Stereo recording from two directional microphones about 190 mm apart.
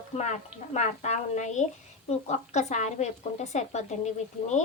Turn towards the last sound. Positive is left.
turn(degrees=40)  # may be behind; listen again after turning